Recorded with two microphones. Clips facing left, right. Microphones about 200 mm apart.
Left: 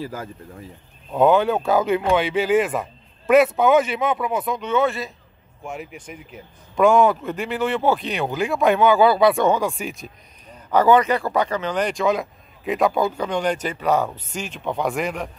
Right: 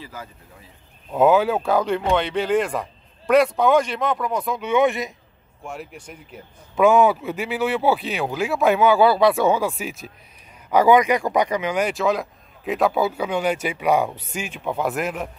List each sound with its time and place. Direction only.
0.0 s speech: 45° left (ahead or behind)
1.1 s speech: 5° right (ahead or behind)
4.6 s speech: 15° right (ahead or behind)
5.6 s speech: centre (ahead or behind)